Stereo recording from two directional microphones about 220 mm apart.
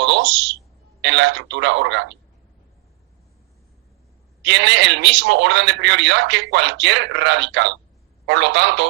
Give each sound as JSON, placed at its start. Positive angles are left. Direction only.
{"t": 0.0, "sound": "a sound", "side_deg": -55}
{"t": 1.0, "sound": "speech", "side_deg": -55}
{"t": 4.4, "sound": "a man's voice", "side_deg": -55}